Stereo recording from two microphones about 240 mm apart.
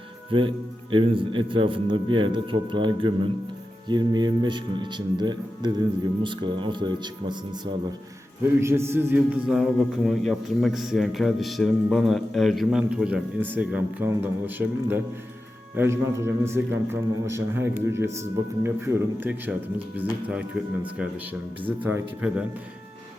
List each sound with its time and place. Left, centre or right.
0.3 s speech: right
8.6 s a man's voice: centre
21.8 s a man's voice: centre